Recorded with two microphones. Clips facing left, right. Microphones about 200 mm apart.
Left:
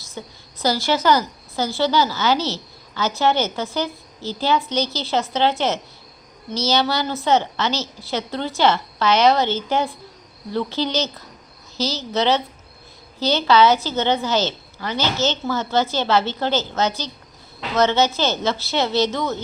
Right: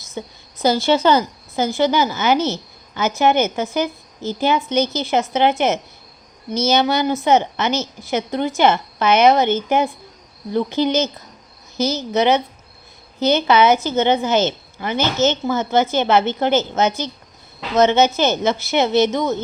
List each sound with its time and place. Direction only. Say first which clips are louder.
0.0 s a woman's voice: right 4 dB; 20° right (ahead or behind)